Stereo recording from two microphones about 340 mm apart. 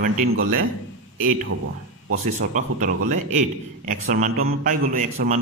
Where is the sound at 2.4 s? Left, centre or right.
Right.